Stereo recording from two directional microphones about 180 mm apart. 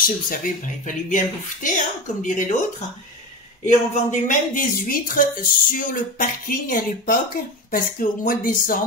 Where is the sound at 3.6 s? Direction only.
45° left (ahead or behind).